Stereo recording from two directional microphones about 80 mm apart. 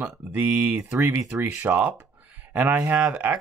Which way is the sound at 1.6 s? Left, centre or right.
Right.